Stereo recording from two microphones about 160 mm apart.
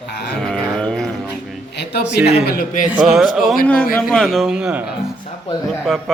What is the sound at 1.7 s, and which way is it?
Speech, 90° left.